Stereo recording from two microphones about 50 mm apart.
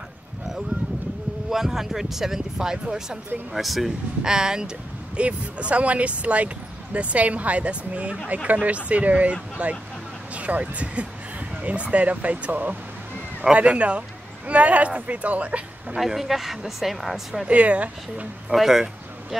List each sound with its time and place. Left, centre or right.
1.5 s speech: centre
3.5 s speech: centre
4.2 s speech: centre
16.0 s speech: centre
17.5 s speech: right
18.5 s speech: centre